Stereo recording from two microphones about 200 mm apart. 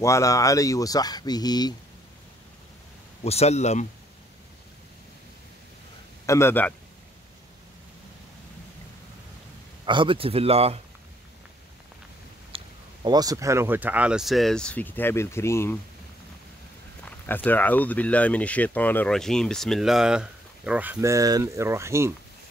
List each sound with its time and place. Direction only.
0.0 s speech: 15° left (ahead or behind)
3.3 s speech: 30° left (ahead or behind)
6.2 s a man's voice: 15° left (ahead or behind)
9.8 s speech: 25° right (ahead or behind)
12.5 s speech: 20° right (ahead or behind); by 15.8 s 15° left (ahead or behind)
17.0 s speech: 10° left (ahead or behind); by 22.1 s 15° right (ahead or behind)